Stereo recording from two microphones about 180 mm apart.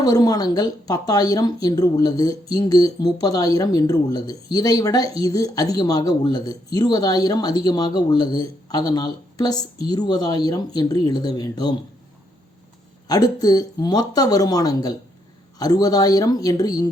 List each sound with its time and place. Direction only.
0.0 s speech: 20° left (ahead or behind)
13.1 s speech: 20° left (ahead or behind)